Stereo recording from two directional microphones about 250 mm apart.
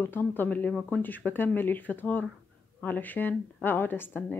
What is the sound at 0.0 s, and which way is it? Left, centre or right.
Speech, centre.